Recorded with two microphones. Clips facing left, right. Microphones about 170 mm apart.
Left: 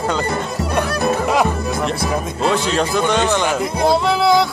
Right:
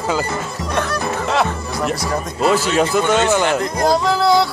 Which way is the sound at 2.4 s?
5° right (ahead or behind).